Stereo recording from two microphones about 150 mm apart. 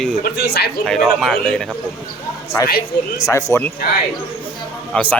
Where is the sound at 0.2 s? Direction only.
90° left.